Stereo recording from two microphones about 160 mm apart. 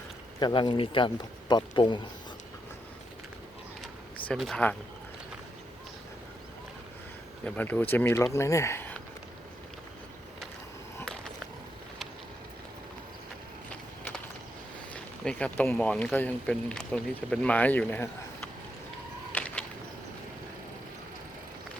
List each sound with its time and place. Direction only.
0.3 s speech: 30° left (ahead or behind)
4.3 s speech: 5° left (ahead or behind)
7.4 s speech: 10° left (ahead or behind)
11.0 s a sound: 5° left (ahead or behind)
15.2 s speech: 5° left (ahead or behind)
19.3 s a sound: 10° left (ahead or behind)